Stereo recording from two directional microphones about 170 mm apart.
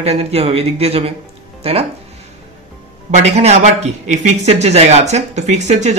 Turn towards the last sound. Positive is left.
turn(degrees=-40)  # may be behind; listen again after turning